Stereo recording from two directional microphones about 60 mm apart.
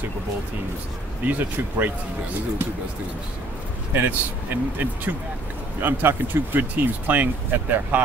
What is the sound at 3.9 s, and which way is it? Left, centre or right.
Speech, right.